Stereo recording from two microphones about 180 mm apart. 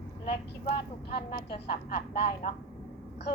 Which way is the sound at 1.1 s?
60° left (ahead or behind).